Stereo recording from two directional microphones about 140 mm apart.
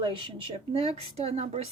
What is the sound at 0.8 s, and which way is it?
Speech, 45° right (ahead or behind).